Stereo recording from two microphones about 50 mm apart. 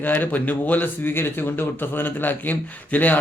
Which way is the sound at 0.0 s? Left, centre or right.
Left.